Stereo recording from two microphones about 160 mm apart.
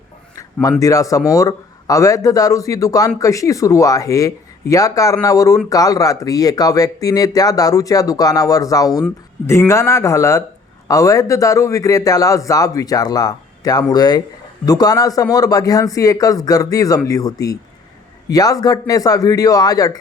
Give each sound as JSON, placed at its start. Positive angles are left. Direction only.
{"t": 0.8, "sound": "speech", "side_deg": 20}